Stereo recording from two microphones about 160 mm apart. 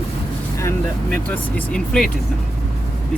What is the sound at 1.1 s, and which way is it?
Speech, 10° left (ahead or behind).